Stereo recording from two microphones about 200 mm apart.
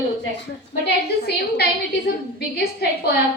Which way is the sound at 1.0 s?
55° left (ahead or behind).